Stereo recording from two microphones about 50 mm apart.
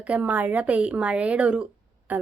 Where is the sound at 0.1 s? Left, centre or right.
Right.